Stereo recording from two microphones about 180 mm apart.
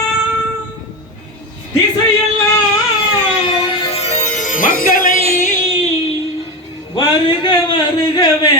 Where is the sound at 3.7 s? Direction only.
30° left (ahead or behind).